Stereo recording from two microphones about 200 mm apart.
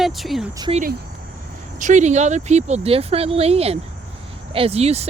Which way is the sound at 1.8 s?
40° right (ahead or behind).